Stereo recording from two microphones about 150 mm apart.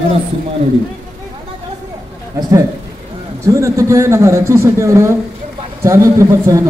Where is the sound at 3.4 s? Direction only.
20° right (ahead or behind).